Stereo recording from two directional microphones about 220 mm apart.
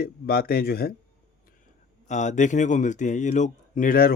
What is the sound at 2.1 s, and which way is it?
A man's voice, 35° left (ahead or behind).